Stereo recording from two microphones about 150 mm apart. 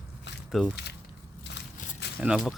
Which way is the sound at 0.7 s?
90° left.